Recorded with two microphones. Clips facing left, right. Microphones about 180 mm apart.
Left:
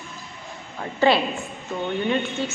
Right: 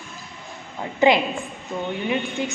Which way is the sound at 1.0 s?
15° right (ahead or behind).